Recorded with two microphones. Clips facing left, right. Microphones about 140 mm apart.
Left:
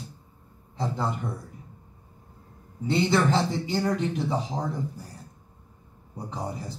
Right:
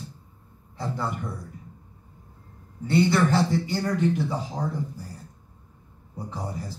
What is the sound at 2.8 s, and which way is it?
Speech, 20° left (ahead or behind).